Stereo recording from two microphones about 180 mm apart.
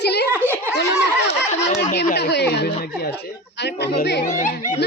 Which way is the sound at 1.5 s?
40° left (ahead or behind).